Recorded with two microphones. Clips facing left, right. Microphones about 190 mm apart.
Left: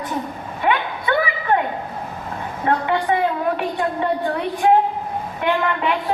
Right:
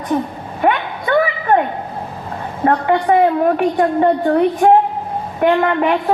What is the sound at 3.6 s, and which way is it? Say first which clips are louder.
Speech: right 8 dB; 45° right (ahead or behind).